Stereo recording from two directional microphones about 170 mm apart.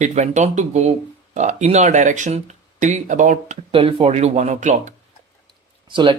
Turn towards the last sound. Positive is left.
turn(degrees=-30)  # may be behind; listen again after turning